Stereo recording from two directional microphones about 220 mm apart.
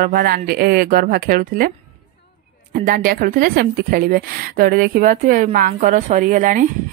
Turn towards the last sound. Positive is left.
turn(degrees=-35)  # may be behind; listen again after turning